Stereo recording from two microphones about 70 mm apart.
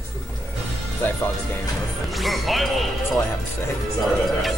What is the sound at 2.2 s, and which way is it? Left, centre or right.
Speech, centre.